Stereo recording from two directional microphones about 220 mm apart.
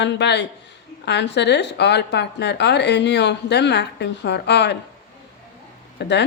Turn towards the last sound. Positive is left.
turn(degrees=50)  # may be behind; listen again after turning